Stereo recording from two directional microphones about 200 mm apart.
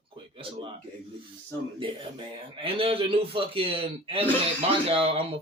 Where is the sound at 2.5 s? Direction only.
25° right (ahead or behind).